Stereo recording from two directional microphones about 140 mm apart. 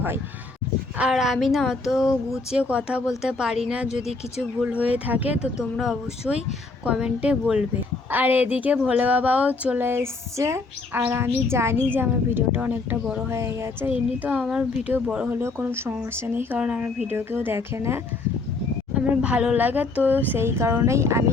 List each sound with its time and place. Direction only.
0.9 s speech: 5° right (ahead or behind); by 21.2 s 20° right (ahead or behind)